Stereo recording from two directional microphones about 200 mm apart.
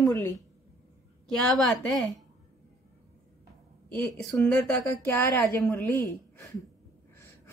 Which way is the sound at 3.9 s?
5° left (ahead or behind).